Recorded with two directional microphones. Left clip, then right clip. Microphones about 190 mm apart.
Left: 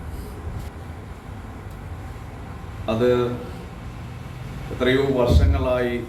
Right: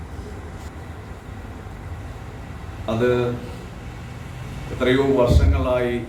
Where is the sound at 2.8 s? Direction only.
5° right (ahead or behind).